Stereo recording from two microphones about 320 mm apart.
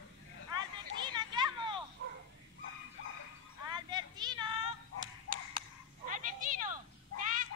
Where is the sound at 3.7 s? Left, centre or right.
Centre.